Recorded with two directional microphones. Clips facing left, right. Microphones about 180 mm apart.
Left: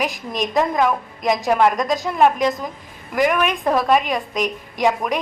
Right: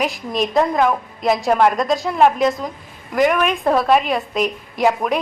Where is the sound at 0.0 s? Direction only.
Centre (ahead or behind).